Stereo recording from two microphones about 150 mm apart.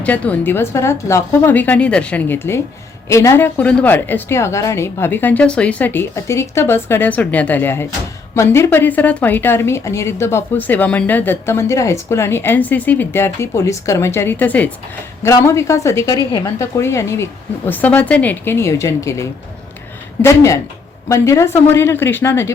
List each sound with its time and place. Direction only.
0.0 s a woman's voice: 10° left (ahead or behind)
20.2 s a woman's voice: 20° left (ahead or behind)